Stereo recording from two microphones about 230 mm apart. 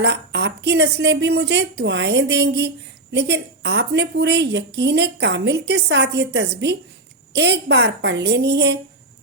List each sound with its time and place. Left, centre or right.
0.0 s a woman's voice: right